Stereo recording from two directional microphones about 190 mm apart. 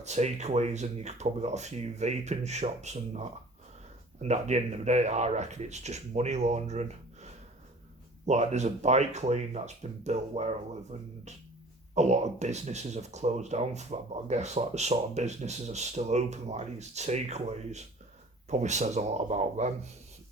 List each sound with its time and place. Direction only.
0.0 s speech: 35° right (ahead or behind)
8.3 s speech: 35° right (ahead or behind)